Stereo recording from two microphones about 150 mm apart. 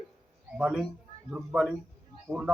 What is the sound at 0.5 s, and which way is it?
A man's voice, 5° right (ahead or behind).